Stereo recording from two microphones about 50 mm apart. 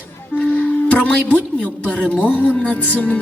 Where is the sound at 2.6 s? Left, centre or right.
Left.